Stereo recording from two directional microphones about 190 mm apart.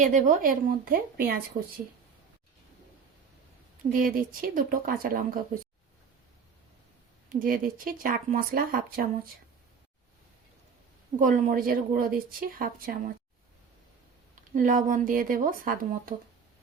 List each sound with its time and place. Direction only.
0.0 s speech: 40° right (ahead or behind)
3.9 s speech: 45° right (ahead or behind)
7.3 s speech: 45° right (ahead or behind)
11.2 s speech: 40° right (ahead or behind)
14.5 s speech: 45° right (ahead or behind)